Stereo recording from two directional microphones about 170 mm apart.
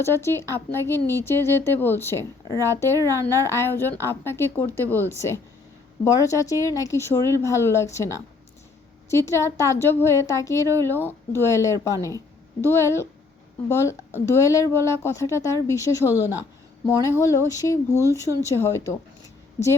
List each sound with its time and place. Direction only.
0.0 s speech: 15° left (ahead or behind)